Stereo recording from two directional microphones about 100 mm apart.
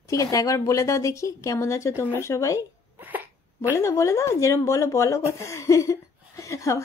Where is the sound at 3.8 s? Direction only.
30° left (ahead or behind).